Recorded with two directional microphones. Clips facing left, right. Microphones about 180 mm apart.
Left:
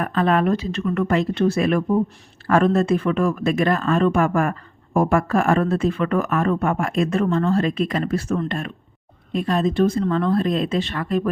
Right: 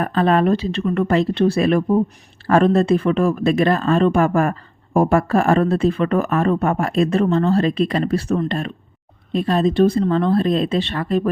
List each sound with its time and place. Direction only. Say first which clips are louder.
0.0 s speech: right 3 dB; 35° right (ahead or behind)